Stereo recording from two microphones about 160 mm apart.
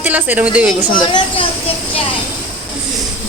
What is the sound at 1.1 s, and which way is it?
Speech, 35° left (ahead or behind).